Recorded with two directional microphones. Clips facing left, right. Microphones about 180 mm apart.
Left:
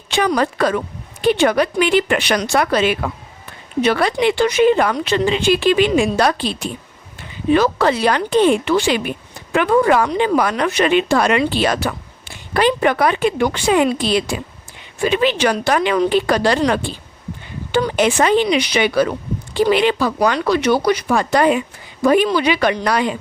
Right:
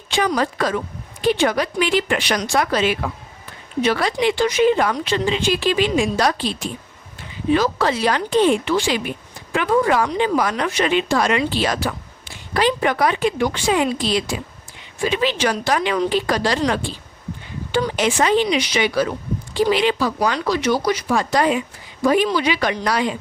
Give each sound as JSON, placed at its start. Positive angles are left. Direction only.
{"t": 0.1, "sound": "speech", "side_deg": 65}